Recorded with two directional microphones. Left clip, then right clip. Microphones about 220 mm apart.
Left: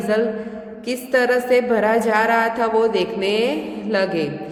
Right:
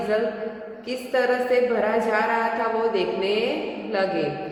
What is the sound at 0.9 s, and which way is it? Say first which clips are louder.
A woman's voice: left 4 dB; 50° left (ahead or behind).